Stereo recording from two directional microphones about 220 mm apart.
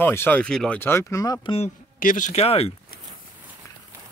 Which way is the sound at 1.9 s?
35° left (ahead or behind).